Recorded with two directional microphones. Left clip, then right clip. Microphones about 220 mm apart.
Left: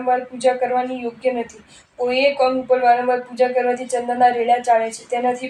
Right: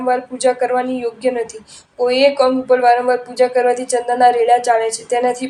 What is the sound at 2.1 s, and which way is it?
Speech, 30° right (ahead or behind).